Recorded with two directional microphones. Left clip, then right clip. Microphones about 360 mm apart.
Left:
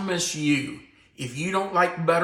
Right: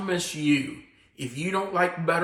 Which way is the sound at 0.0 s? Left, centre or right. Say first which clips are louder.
Left 1 dB; centre.